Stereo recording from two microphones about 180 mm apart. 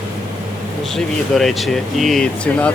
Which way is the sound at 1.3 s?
Centre (ahead or behind).